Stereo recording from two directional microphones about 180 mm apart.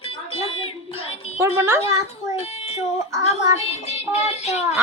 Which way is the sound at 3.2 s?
35° left (ahead or behind).